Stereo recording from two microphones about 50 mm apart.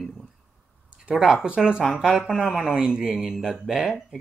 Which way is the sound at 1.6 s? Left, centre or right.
Centre.